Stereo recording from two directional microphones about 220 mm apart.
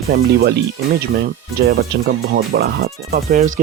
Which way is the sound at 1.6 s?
50° right (ahead or behind).